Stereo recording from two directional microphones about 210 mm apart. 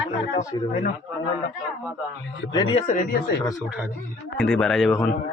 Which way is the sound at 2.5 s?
25° left (ahead or behind).